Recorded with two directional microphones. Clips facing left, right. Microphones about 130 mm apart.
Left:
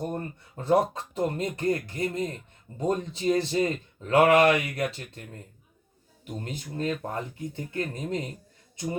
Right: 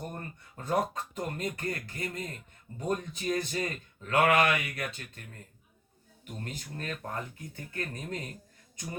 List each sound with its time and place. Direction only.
0.0 s speech: 25° left (ahead or behind)